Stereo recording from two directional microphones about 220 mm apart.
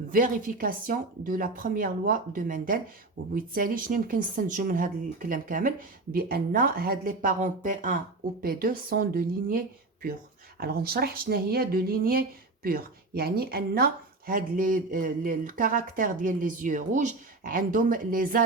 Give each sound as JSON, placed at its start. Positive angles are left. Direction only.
{"t": 0.1, "sound": "speech", "side_deg": -40}